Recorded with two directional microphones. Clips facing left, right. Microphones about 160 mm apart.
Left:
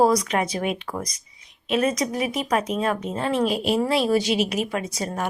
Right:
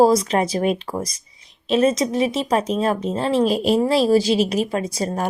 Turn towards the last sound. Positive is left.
turn(degrees=-35)  # may be behind; listen again after turning